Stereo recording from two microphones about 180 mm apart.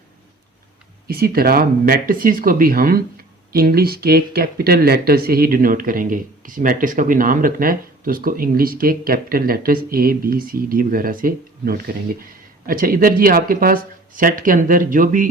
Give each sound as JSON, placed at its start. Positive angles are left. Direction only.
{"t": 1.0, "sound": "speech", "side_deg": -55}